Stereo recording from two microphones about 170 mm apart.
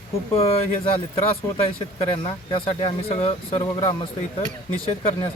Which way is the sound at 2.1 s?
30° left (ahead or behind).